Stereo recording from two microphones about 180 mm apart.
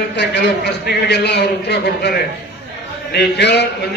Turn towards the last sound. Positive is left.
turn(degrees=70)  # may be behind; listen again after turning